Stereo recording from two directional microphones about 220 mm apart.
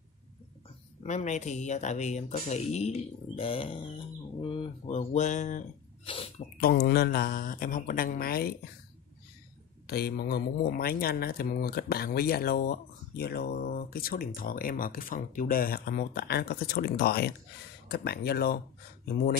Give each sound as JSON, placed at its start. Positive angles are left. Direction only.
{"t": 1.0, "sound": "speech", "side_deg": 30}
{"t": 6.0, "sound": "speech", "side_deg": 25}
{"t": 6.9, "sound": "speech", "side_deg": 45}
{"t": 9.8, "sound": "speech", "side_deg": 45}